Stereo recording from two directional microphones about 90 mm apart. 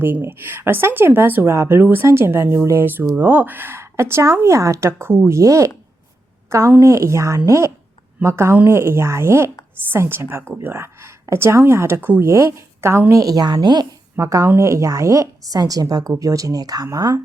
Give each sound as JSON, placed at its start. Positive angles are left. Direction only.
{"t": 0.0, "sound": "speech", "side_deg": -25}
{"t": 11.9, "sound": "speech", "side_deg": -20}
{"t": 12.2, "sound": "speech", "side_deg": -30}
{"t": 14.2, "sound": "speech", "side_deg": -35}